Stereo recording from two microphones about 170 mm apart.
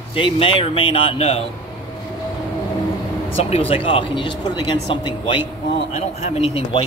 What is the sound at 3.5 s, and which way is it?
Speech, 35° left (ahead or behind).